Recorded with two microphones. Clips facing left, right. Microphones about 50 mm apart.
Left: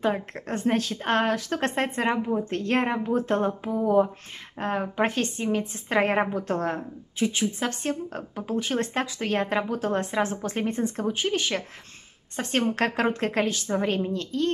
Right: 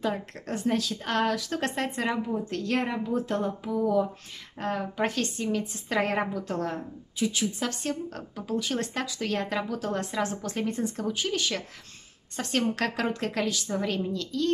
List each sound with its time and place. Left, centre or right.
0.0 s a woman's voice: left